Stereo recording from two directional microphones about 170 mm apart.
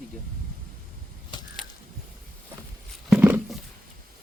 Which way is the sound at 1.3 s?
25° left (ahead or behind).